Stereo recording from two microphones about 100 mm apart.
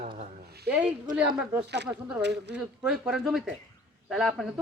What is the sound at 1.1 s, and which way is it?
A woman's voice, 10° right (ahead or behind).